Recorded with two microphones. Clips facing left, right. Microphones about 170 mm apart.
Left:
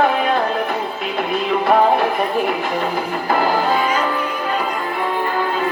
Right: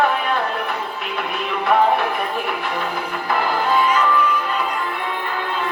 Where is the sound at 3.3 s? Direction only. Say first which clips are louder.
Left 3 dB; 45° left (ahead or behind).